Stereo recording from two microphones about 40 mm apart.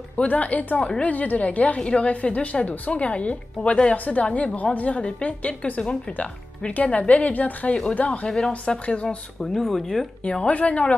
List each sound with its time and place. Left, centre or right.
0.2 s a woman's voice: left
0.7 s speech: left
1.0 s a woman's voice: left
1.8 s a woman's voice: left
8.3 s speech: centre
8.6 s speech: left
9.4 s speech: centre
10.2 s speech: left
10.5 s a woman's voice: left